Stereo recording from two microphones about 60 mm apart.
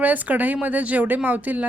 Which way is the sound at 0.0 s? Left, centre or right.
Right.